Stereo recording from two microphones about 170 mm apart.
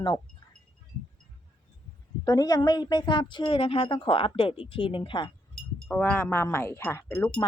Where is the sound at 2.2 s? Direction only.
20° left (ahead or behind).